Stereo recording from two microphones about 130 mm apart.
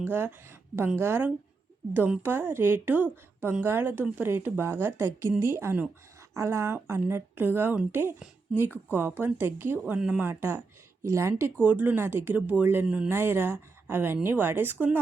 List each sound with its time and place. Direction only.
0.0 s a woman's voice: 15° right (ahead or behind)
9.8 s a woman's voice: 5° right (ahead or behind)